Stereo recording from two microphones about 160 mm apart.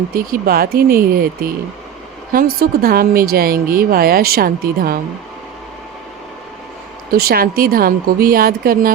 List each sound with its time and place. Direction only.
0.1 s a woman's voice: 65° right (ahead or behind)
7.1 s speech: 70° right (ahead or behind)